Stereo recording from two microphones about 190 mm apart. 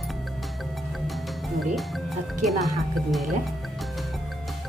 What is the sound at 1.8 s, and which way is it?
Speech, centre (ahead or behind).